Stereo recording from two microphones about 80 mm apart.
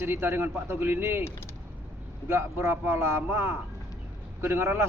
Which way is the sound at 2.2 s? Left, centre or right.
Right.